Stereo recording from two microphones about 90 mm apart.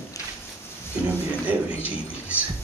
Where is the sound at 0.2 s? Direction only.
40° left (ahead or behind).